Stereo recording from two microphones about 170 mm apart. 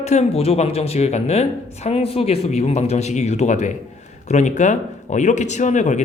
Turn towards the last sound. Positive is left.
turn(degrees=45)  # may be behind; listen again after turning